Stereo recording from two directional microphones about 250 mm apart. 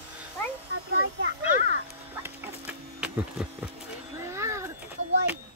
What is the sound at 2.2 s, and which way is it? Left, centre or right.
Printer, centre.